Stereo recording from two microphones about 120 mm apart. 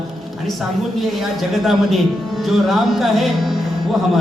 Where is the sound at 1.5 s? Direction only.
Centre (ahead or behind).